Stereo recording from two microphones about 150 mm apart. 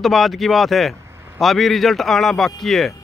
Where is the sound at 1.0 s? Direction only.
15° right (ahead or behind).